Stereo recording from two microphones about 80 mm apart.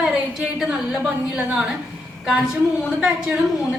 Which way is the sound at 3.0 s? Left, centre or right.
Centre.